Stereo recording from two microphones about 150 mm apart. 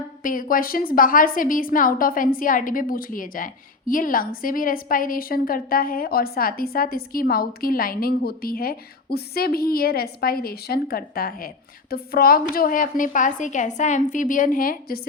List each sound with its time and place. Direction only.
0.2 s a woman's voice: 70° left (ahead or behind)
12.5 s a woman's voice: 65° left (ahead or behind)